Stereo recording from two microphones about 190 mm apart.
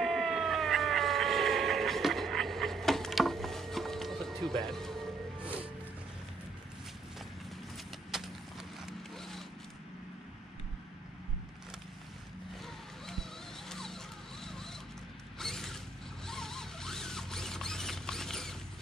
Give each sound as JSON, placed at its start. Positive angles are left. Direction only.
{"t": 0.0, "sound": "cat", "side_deg": 0}
{"t": 4.6, "sound": "music", "side_deg": 0}
{"t": 7.7, "sound": "vehicle", "side_deg": 0}
{"t": 12.6, "sound": "a sound", "side_deg": 0}
{"t": 14.4, "sound": "zipper", "side_deg": 0}
{"t": 15.3, "sound": "mechanisms", "side_deg": 0}
{"t": 16.3, "sound": "zipper", "side_deg": 0}